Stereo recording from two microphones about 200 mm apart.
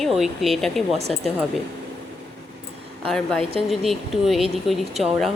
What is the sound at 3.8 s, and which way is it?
Speech, centre (ahead or behind).